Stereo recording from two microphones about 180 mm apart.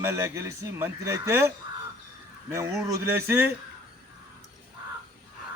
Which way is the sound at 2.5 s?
15° right (ahead or behind).